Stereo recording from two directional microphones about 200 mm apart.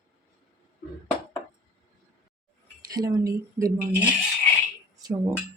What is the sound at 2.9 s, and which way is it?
Speech, 20° right (ahead or behind).